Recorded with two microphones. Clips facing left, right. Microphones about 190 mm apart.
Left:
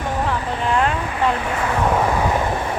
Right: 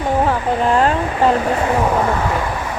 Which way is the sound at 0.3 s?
40° right (ahead or behind).